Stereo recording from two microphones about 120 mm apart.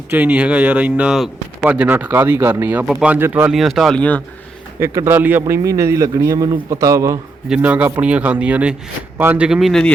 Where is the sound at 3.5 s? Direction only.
Centre (ahead or behind).